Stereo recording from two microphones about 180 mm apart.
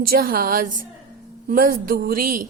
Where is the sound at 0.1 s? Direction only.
55° right (ahead or behind).